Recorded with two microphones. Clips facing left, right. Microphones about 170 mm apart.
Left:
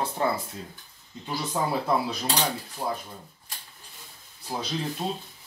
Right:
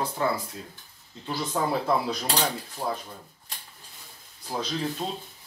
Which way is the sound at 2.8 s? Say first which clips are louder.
Even; centre (ahead or behind).